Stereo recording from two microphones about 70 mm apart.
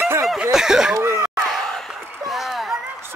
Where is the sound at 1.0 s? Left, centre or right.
Right.